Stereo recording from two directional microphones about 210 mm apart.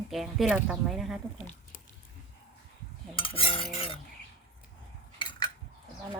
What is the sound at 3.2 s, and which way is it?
Stir, 25° left (ahead or behind).